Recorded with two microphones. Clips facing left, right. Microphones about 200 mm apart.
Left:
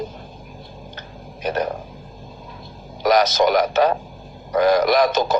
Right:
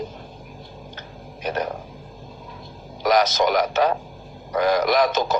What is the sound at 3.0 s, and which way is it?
Speech, 35° left (ahead or behind).